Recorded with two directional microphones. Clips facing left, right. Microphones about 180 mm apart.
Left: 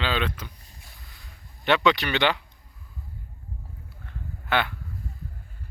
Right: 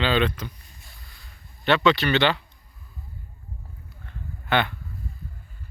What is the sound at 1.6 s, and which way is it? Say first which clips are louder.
Speech: right 2 dB; 15° left (ahead or behind).